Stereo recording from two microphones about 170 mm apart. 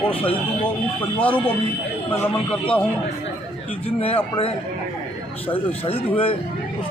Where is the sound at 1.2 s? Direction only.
10° left (ahead or behind).